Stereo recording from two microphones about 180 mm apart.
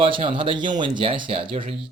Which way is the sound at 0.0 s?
30° right (ahead or behind).